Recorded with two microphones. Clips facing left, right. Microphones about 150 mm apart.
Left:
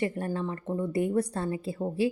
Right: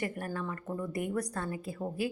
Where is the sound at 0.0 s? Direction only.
25° left (ahead or behind).